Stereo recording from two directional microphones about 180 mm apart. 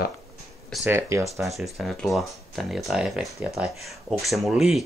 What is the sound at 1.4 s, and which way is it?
Speech, centre (ahead or behind).